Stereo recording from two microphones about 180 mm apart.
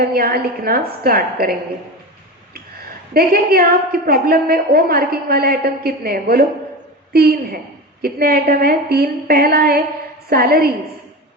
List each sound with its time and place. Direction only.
0.0 s a woman's voice: 55° right (ahead or behind)
3.1 s a woman's voice: 55° right (ahead or behind)